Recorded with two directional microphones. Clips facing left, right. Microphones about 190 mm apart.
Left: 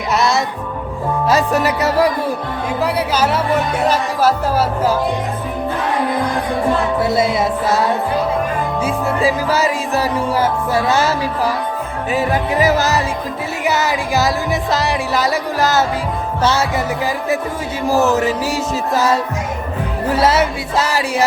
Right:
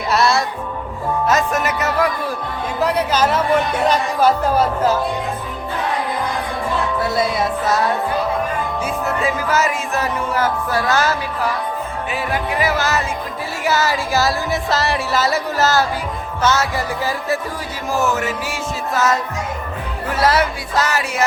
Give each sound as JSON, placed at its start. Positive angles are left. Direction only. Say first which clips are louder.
{"t": 0.1, "sound": "music", "louder": "even", "side_deg": 20}
{"t": 1.3, "sound": "music", "louder": "left 4 dB", "side_deg": 35}
{"t": 2.8, "sound": "music", "louder": "right 1 dB", "side_deg": 10}
{"t": 7.0, "sound": "music", "louder": "left 2 dB", "side_deg": 25}
{"t": 8.8, "sound": "music", "louder": "left 5 dB", "side_deg": 30}
{"t": 12.1, "sound": "music", "louder": "left 6 dB", "side_deg": 40}
{"t": 13.7, "sound": "music", "louder": "left 1 dB", "side_deg": 20}
{"t": 16.4, "sound": "music", "louder": "left 1 dB", "side_deg": 30}
{"t": 17.8, "sound": "music", "louder": "left 5 dB", "side_deg": 35}